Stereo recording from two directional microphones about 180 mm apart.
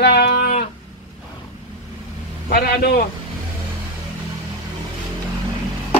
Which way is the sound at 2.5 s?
55° left (ahead or behind).